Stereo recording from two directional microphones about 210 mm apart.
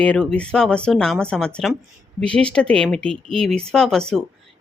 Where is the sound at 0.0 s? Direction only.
5° left (ahead or behind).